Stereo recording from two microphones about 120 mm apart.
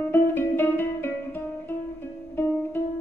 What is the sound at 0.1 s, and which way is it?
Music, 15° left (ahead or behind).